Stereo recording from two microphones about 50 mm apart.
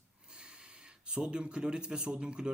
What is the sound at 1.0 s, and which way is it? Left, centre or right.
Speech, centre.